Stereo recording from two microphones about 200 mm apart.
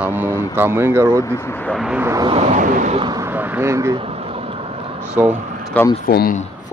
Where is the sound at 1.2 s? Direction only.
15° left (ahead or behind).